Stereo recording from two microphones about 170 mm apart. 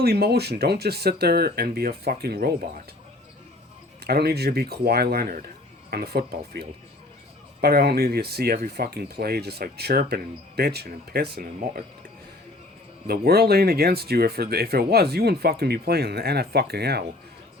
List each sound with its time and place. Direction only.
0.0 s speech: 70° right (ahead or behind)
4.0 s speech: 70° right (ahead or behind)
13.1 s speech: 65° right (ahead or behind)